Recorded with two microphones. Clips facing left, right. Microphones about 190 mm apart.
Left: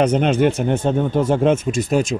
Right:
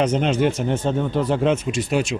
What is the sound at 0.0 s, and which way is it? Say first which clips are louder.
A man's voice: left 3 dB; 55° left (ahead or behind).